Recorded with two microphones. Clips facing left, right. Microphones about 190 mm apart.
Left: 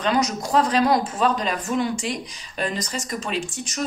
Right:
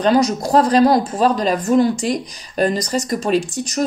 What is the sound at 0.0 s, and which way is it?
Speech, 35° right (ahead or behind).